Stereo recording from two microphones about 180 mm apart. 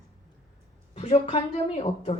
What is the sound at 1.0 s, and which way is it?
A woman's voice, 35° left (ahead or behind).